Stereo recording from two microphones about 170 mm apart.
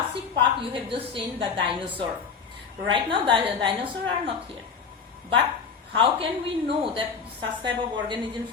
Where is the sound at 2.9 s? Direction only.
30° right (ahead or behind).